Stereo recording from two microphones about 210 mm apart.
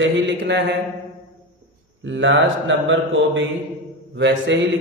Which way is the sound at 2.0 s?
60° right (ahead or behind).